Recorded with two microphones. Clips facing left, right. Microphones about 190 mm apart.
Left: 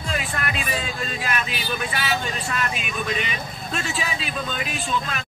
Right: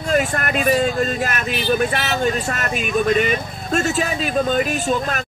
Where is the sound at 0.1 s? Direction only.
50° right (ahead or behind).